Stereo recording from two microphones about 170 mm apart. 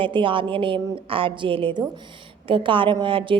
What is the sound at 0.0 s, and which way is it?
A woman's voice, 30° right (ahead or behind).